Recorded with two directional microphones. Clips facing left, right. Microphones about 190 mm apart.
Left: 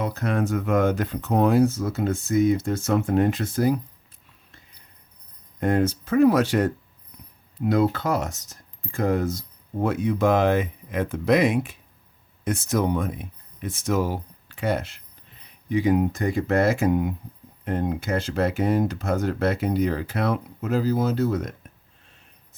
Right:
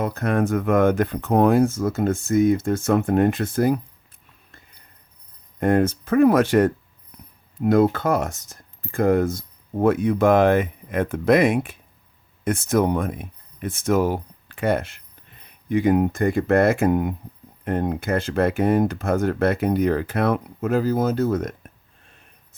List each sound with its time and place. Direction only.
0.0 s speech: 50° right (ahead or behind)
5.5 s speech: 55° right (ahead or behind)